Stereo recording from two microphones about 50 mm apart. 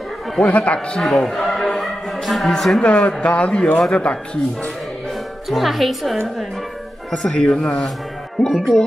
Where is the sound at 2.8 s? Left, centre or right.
Left.